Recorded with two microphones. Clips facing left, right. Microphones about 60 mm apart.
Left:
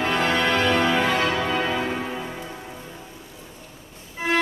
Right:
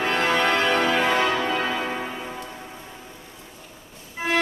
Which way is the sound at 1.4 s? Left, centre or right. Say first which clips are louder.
Left 1 dB; centre.